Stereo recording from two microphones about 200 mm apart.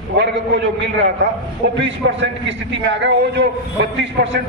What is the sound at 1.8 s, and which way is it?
A man's voice, 65° right (ahead or behind).